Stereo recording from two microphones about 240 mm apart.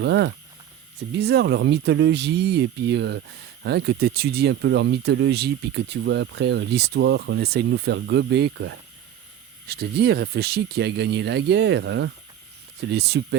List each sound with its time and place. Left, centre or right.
0.0 s speech: right